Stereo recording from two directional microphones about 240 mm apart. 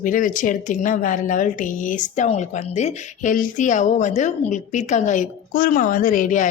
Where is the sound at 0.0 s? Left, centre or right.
Left.